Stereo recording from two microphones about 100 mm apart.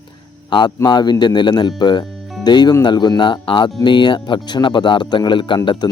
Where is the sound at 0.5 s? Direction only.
50° left (ahead or behind).